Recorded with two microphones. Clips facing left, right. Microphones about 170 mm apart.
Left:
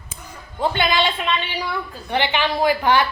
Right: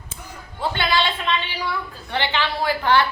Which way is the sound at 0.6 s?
20° left (ahead or behind).